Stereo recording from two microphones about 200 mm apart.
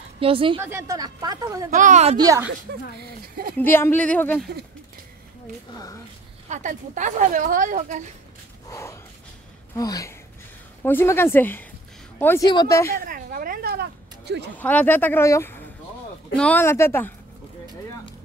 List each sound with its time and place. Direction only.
0.2 s a woman's voice: 25° right (ahead or behind)
0.6 s speech: 10° right (ahead or behind)
1.7 s speech: 40° right (ahead or behind)
2.1 s speech: 15° right (ahead or behind)
3.5 s speech: 10° left (ahead or behind)
6.5 s speech: 40° right (ahead or behind)
8.6 s a sound: 15° left (ahead or behind)
9.8 s speech: 15° left (ahead or behind)
12.9 s speech: 45° right (ahead or behind)
14.6 s speech: 10° left (ahead or behind)